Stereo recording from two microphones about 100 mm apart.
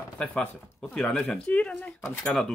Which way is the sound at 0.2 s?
10° left (ahead or behind).